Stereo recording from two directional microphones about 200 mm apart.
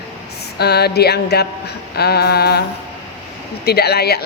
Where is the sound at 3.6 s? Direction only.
55° left (ahead or behind).